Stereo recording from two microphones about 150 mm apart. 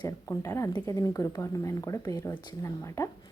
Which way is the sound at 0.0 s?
20° left (ahead or behind).